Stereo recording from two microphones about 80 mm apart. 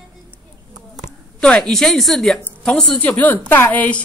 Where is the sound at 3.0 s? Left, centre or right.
Centre.